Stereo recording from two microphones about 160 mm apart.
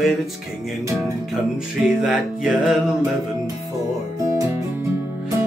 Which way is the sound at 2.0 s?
Centre (ahead or behind).